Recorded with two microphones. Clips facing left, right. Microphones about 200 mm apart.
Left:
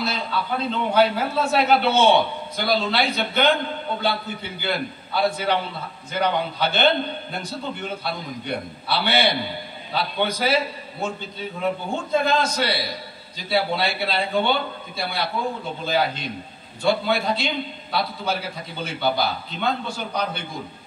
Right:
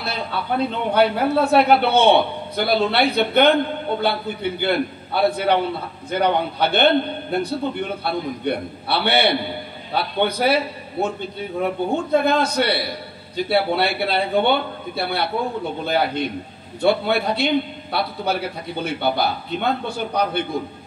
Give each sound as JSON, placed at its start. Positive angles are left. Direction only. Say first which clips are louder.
{"t": 0.0, "sound": "a man's voice", "louder": "even", "side_deg": -60}